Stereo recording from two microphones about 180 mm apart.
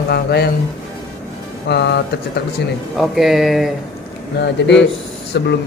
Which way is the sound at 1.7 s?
75° left (ahead or behind).